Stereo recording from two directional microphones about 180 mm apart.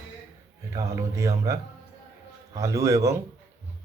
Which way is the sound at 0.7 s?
15° right (ahead or behind).